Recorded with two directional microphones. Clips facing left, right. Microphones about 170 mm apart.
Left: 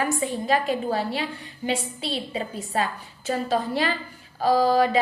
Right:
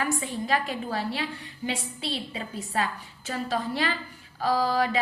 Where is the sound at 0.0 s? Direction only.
25° left (ahead or behind).